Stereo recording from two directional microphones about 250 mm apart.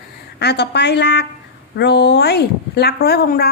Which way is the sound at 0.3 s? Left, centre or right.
Left.